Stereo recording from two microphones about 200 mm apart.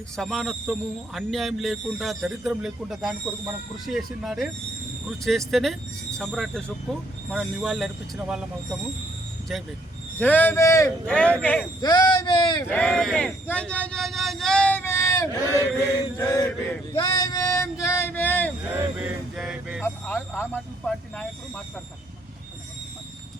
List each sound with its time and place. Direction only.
0.2 s speech: centre (ahead or behind)
10.2 s speech: 10° left (ahead or behind)
11.8 s speech: 20° left (ahead or behind)
12.7 s speech: 5° left (ahead or behind)
16.9 s a sound: 15° left (ahead or behind)
18.7 s a sound: 10° right (ahead or behind)
19.8 s speech: 10° left (ahead or behind)